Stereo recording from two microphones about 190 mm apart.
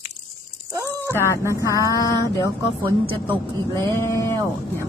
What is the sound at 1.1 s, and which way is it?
Speech, 15° left (ahead or behind).